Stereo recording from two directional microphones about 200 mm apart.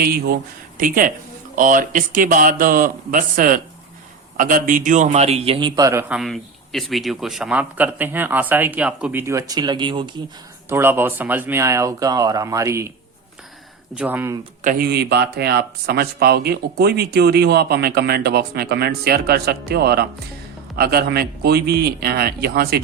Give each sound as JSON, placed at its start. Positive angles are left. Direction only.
{"t": 0.0, "sound": "a man's voice", "side_deg": -50}
{"t": 10.7, "sound": "a man's voice", "side_deg": -10}
{"t": 13.9, "sound": "a man's voice", "side_deg": -10}
{"t": 14.6, "sound": "speech", "side_deg": -45}